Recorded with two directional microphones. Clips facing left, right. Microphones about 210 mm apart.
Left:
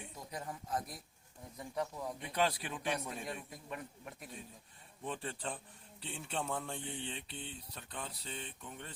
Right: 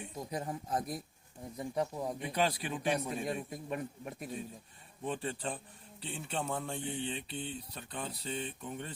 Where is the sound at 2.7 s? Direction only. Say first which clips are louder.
Right 5 dB; 15° right (ahead or behind).